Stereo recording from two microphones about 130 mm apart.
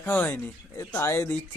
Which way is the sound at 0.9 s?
20° left (ahead or behind).